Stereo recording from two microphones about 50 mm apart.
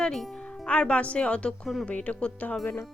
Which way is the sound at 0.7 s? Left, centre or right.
Left.